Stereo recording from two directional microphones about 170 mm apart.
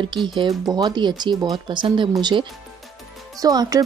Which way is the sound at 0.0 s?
25° right (ahead or behind).